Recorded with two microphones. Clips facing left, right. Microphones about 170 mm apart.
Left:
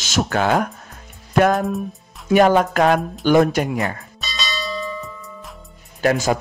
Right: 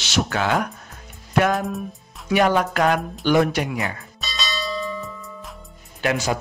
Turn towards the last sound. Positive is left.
turn(degrees=45)  # may be behind; listen again after turning